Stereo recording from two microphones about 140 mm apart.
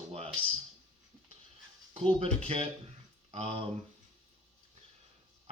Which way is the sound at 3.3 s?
45° right (ahead or behind).